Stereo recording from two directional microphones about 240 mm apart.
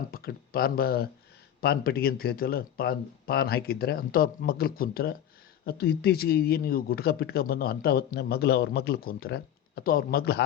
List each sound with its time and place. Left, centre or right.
0.1 s speech: left